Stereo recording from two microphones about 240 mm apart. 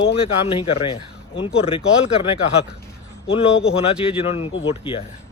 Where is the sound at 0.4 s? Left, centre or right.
Left.